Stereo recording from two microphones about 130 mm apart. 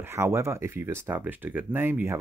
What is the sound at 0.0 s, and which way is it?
Speech, 20° right (ahead or behind).